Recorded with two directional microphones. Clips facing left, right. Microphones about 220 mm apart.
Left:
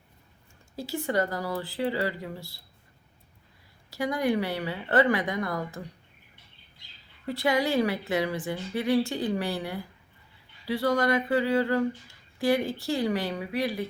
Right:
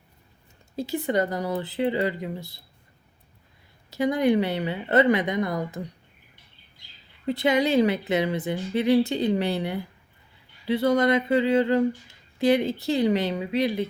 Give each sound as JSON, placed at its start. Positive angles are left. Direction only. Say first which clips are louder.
{"t": 0.8, "sound": "speech", "louder": "right 3 dB", "side_deg": -20}
{"t": 3.8, "sound": "speech", "louder": "right 5 dB", "side_deg": -20}
{"t": 7.3, "sound": "speech", "louder": "right 4 dB", "side_deg": -20}